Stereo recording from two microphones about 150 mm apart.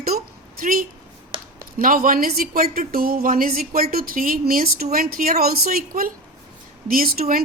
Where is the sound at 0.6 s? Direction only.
70° right (ahead or behind).